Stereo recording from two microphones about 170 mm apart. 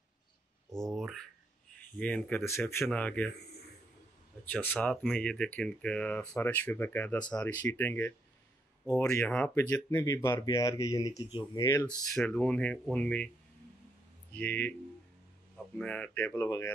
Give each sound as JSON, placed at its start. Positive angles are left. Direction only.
{"t": 0.7, "sound": "speech", "side_deg": 0}
{"t": 4.5, "sound": "speech", "side_deg": 10}
{"t": 9.3, "sound": "speech", "side_deg": 5}
{"t": 14.3, "sound": "speech", "side_deg": 10}